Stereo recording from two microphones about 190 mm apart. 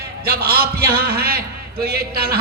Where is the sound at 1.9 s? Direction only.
55° right (ahead or behind).